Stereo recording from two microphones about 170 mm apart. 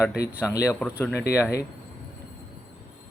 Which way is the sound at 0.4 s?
20° left (ahead or behind).